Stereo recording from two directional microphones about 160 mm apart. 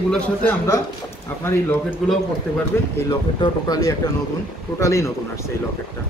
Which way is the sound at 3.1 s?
25° left (ahead or behind).